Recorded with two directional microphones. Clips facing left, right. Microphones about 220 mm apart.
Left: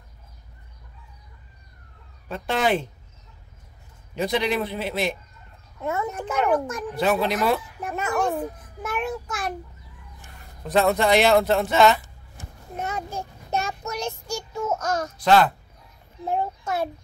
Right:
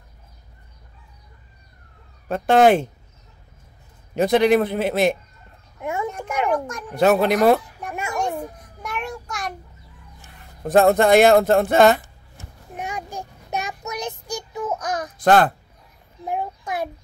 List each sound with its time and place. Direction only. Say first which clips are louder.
2.2 s speech: right 9 dB; 45° right (ahead or behind)
4.1 s speech: right 8 dB; 50° right (ahead or behind)
5.8 s a child's voice: right 1 dB; 15° right (ahead or behind)
7.0 s speech: right 6 dB; 50° right (ahead or behind)
7.9 s a child's voice: left 2 dB; 10° right (ahead or behind)
8.2 s a sound: even; 5° left (ahead or behind)
10.6 s speech: right 5 dB; 50° right (ahead or behind)
12.7 s child singing: left 1 dB; 15° right (ahead or behind)
15.2 s speech: right 2 dB; 50° right (ahead or behind)
16.3 s child singing: left 1 dB; 15° right (ahead or behind)